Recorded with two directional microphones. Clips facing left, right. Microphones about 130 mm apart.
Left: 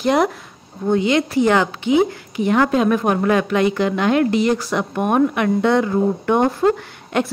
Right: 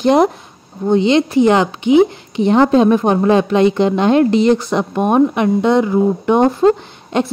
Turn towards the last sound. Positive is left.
turn(degrees=-25)  # may be behind; listen again after turning